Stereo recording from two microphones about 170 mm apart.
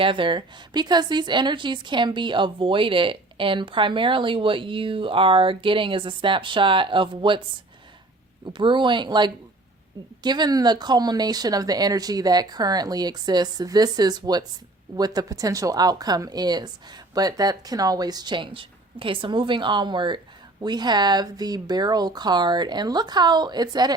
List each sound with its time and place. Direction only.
0.0 s speech: 30° right (ahead or behind)
8.5 s speech: 30° right (ahead or behind)